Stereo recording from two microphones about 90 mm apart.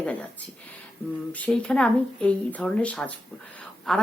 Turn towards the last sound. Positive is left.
turn(degrees=5)  # may be behind; listen again after turning